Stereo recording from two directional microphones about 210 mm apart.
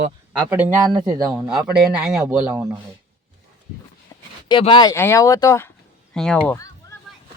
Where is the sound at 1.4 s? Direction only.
5° right (ahead or behind).